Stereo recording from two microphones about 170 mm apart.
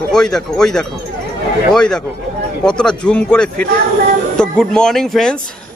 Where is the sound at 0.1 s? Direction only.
5° left (ahead or behind).